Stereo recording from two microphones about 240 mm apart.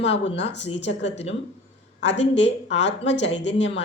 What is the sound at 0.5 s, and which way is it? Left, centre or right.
Speech, left.